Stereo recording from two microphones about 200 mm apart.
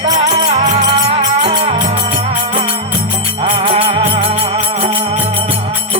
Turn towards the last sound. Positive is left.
turn(degrees=-30)  # may be behind; listen again after turning